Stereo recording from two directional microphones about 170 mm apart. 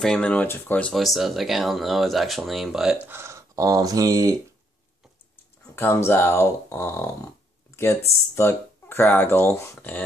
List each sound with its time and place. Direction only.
0.0 s speech: 5° left (ahead or behind)
3.2 s speech: 15° right (ahead or behind)
5.8 s speech: 15° left (ahead or behind)
7.7 s a sound: 15° left (ahead or behind)
8.4 s speech: 15° left (ahead or behind)